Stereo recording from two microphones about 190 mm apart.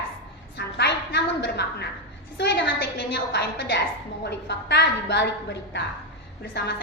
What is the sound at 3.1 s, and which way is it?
A woman's voice, 60° left (ahead or behind).